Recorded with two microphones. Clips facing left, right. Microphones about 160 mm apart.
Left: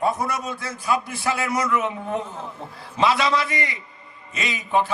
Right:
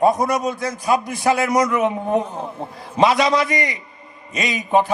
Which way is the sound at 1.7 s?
20° right (ahead or behind).